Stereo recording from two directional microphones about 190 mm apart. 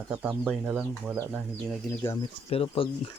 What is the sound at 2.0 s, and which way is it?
Speech, 15° left (ahead or behind).